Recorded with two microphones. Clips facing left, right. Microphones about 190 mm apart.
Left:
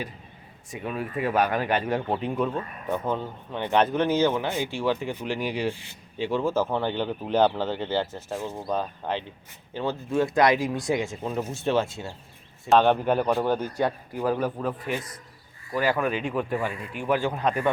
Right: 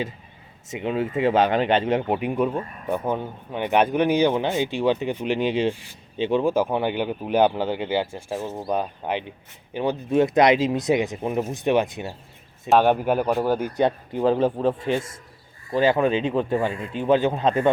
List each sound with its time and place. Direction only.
0.7 s speech: 25° right (ahead or behind)